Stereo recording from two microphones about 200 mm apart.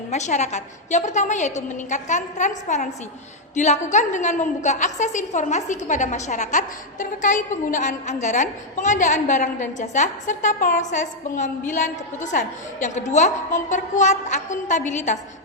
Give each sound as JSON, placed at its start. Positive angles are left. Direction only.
{"t": 0.1, "sound": "a woman's voice", "side_deg": 35}